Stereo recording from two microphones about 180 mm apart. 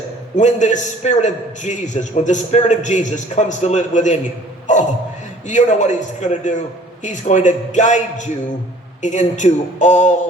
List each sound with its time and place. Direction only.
0.3 s a man's voice: 40° left (ahead or behind)